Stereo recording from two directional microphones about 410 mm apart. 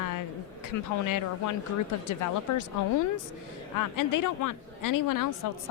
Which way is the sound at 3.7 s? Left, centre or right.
Left.